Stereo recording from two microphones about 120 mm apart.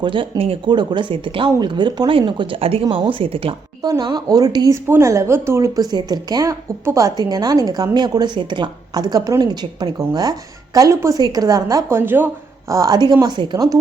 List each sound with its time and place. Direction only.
0.0 s speech: 45° right (ahead or behind)
3.8 s a woman's voice: 35° right (ahead or behind)